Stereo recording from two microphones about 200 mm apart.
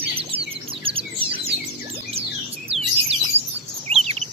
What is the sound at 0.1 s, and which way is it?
Bird, 30° right (ahead or behind).